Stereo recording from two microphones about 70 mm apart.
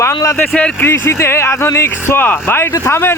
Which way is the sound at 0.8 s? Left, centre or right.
Left.